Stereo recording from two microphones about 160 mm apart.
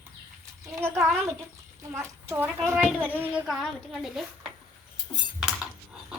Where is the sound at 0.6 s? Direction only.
15° right (ahead or behind).